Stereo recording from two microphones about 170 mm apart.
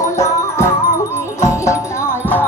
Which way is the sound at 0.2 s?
15° left (ahead or behind).